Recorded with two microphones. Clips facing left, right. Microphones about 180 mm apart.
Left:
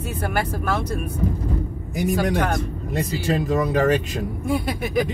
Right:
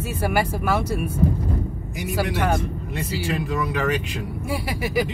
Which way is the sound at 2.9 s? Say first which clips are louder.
Left 4 dB; 40° left (ahead or behind).